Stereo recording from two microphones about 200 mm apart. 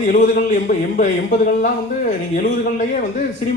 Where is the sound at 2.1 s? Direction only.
40° left (ahead or behind).